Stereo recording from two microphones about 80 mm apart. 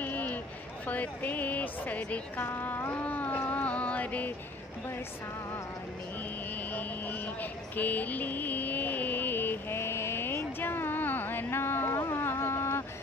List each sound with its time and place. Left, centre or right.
0.0 s a sound: centre
0.8 s speech: centre
6.5 s vehicle: centre